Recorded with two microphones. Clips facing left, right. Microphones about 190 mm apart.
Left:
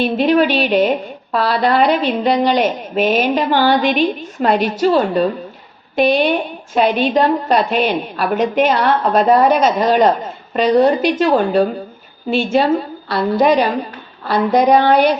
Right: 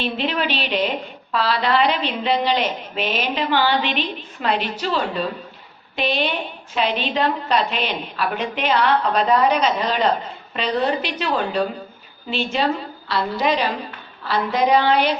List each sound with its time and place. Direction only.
0.0 s a woman's voice: 45° left (ahead or behind)